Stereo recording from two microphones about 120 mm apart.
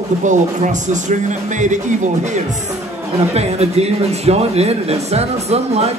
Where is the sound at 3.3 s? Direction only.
60° right (ahead or behind).